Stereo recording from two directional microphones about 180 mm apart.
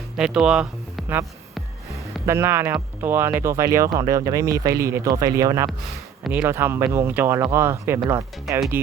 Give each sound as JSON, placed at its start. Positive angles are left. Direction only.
{"t": 0.2, "sound": "speech", "side_deg": -5}
{"t": 1.9, "sound": "a sound", "side_deg": -15}
{"t": 3.0, "sound": "speech", "side_deg": -10}